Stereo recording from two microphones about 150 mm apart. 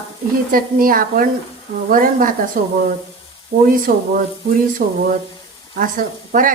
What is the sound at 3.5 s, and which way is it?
Speech, 90° right.